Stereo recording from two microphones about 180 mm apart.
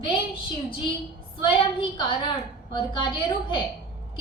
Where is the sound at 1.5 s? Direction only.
25° left (ahead or behind).